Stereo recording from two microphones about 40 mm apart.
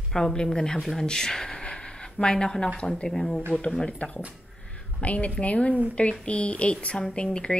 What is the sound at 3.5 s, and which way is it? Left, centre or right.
A woman's voice, left.